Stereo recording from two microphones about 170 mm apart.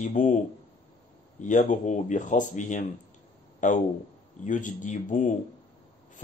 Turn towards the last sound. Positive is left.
turn(degrees=45)  # may be behind; listen again after turning